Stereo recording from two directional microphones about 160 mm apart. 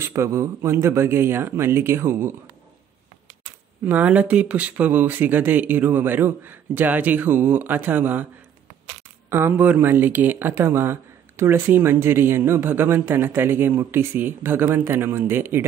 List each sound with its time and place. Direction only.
0.0 s speech: 15° right (ahead or behind)
3.8 s speech: 10° right (ahead or behind)
9.3 s speech: 15° right (ahead or behind)